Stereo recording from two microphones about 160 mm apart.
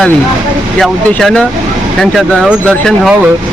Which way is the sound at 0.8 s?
5° left (ahead or behind).